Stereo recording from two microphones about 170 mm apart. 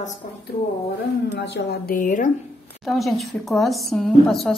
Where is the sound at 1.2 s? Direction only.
90° left; by 2.3 s 50° left (ahead or behind).